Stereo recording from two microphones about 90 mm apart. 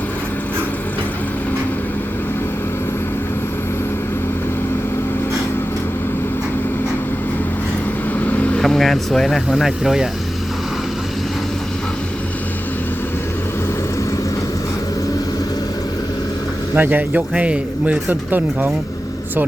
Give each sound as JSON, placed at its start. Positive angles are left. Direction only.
{"t": 8.2, "sound": "vehicle", "side_deg": 20}
{"t": 8.6, "sound": "speech", "side_deg": 0}
{"t": 16.7, "sound": "speech", "side_deg": -20}